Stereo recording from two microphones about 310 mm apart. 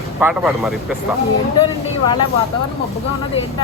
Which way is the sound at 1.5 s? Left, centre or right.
Centre.